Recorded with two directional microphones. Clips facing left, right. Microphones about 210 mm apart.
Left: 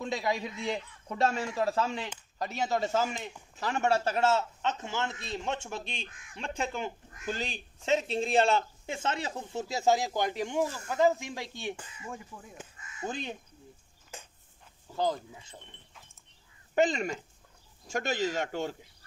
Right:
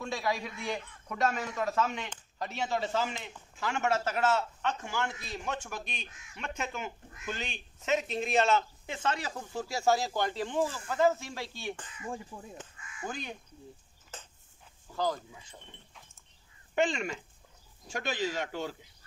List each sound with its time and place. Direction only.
0.0 s a man's voice: 20° left (ahead or behind)
6.0 s speech: 55° left (ahead or behind)
6.3 s speech: 30° left (ahead or behind); by 11.9 s 15° left (ahead or behind)
12.3 s speech: 25° right (ahead or behind)
12.9 s speech: 25° left (ahead or behind)
14.1 s a sound: 10° left (ahead or behind)
15.0 s speech: 20° left (ahead or behind)
16.7 s speech: 40° left (ahead or behind)